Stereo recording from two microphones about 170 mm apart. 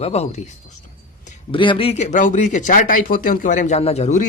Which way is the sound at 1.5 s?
30° left (ahead or behind).